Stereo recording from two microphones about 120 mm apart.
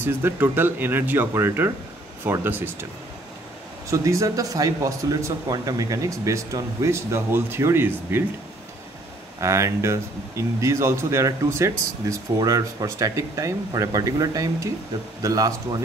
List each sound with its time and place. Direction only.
0.0 s speech: 20° right (ahead or behind)
3.9 s speech: 25° right (ahead or behind)
9.4 s speech: 25° right (ahead or behind)